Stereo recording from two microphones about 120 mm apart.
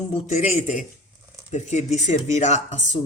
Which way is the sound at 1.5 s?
75° left (ahead or behind).